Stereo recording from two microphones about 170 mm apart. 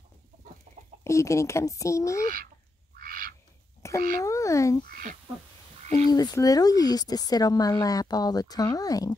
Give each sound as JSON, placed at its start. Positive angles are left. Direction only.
{"t": 0.7, "sound": "chicken", "side_deg": -40}
{"t": 1.0, "sound": "speech", "side_deg": 15}
{"t": 2.2, "sound": "speech", "side_deg": -55}
{"t": 3.0, "sound": "duck", "side_deg": -55}
{"t": 3.8, "sound": "a sound", "side_deg": 15}
{"t": 4.2, "sound": "speech", "side_deg": 20}
{"t": 4.8, "sound": "speech", "side_deg": -60}
{"t": 6.0, "sound": "speech", "side_deg": 25}